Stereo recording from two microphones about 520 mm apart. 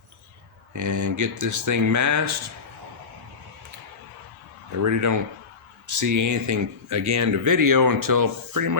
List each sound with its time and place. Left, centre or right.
0.7 s speech: right
4.7 s speech: right